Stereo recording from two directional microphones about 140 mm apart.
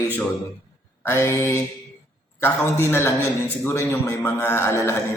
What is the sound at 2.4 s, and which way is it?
Mantra, 15° left (ahead or behind).